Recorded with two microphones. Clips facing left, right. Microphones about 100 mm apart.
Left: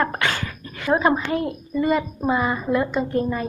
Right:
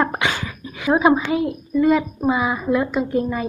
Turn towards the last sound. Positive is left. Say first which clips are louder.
# right 1 dB
turn(degrees=-5)  # may be behind; listen again after turning